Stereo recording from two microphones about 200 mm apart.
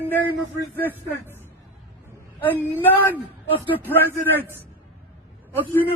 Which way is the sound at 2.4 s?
10° left (ahead or behind).